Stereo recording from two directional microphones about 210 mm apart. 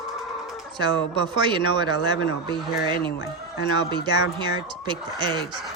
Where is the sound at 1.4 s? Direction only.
20° right (ahead or behind).